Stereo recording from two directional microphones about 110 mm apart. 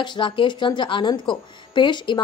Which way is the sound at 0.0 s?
45° left (ahead or behind).